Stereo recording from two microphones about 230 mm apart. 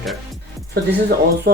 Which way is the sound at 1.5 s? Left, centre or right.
Right.